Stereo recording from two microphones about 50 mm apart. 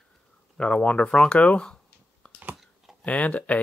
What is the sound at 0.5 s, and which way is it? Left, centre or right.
Speech, left.